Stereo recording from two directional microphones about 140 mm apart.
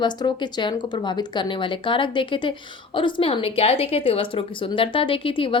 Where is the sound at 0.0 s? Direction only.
30° left (ahead or behind).